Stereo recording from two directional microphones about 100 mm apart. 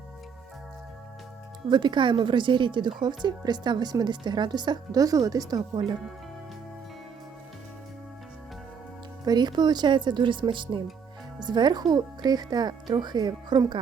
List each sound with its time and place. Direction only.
1.7 s speech: 50° right (ahead or behind)
9.2 s speech: 45° right (ahead or behind)